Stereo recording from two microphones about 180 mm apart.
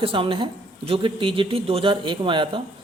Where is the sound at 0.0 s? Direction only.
30° right (ahead or behind).